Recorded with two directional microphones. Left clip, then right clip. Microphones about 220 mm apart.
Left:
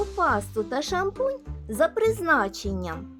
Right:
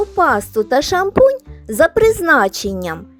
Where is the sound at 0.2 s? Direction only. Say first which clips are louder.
Right 10 dB; 30° right (ahead or behind).